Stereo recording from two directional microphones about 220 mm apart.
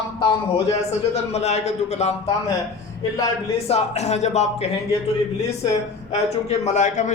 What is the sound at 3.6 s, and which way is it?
Speech, 30° left (ahead or behind).